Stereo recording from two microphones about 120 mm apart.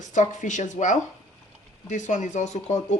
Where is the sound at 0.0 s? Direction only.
90° left; by 2.8 s 75° left (ahead or behind).